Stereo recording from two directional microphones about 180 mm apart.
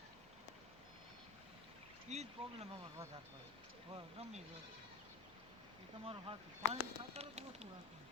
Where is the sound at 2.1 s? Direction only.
40° right (ahead or behind).